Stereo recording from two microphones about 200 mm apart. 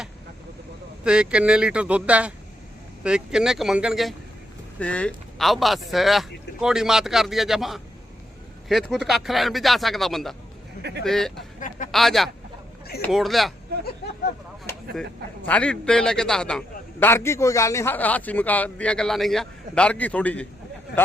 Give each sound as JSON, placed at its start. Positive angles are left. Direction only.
{"t": 1.0, "sound": "a man's voice", "side_deg": -5}
{"t": 14.0, "sound": "a sound", "side_deg": 55}
{"t": 15.4, "sound": "a man's voice", "side_deg": 5}
{"t": 20.9, "sound": "speech", "side_deg": 60}